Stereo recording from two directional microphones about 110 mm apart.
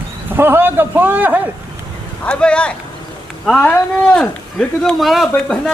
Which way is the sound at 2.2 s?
10° left (ahead or behind).